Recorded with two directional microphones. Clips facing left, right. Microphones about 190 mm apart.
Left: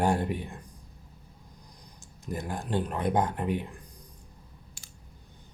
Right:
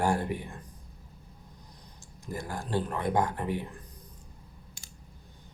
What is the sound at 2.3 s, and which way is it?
Speech, 20° left (ahead or behind).